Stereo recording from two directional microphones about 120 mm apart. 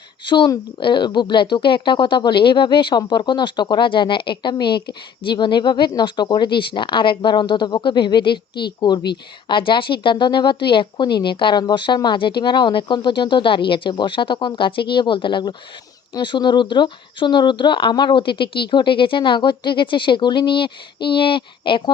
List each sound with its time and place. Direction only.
0.3 s speech: 40° left (ahead or behind)